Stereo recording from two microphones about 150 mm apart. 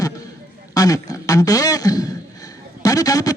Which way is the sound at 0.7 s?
25° left (ahead or behind).